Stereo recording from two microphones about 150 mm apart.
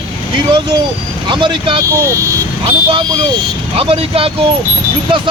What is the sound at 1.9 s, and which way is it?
Speech, 20° right (ahead or behind).